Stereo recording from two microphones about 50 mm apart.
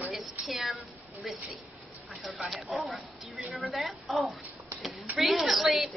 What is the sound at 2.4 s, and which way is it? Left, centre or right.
A woman's voice, centre.